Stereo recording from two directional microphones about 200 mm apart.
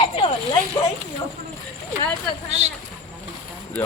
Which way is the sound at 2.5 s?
35° right (ahead or behind).